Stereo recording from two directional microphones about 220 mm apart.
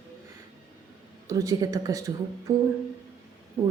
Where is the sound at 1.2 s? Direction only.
15° right (ahead or behind).